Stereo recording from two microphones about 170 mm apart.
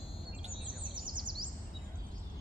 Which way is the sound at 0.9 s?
25° right (ahead or behind).